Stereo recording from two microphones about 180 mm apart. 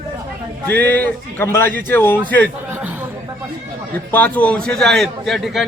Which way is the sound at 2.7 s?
10° right (ahead or behind).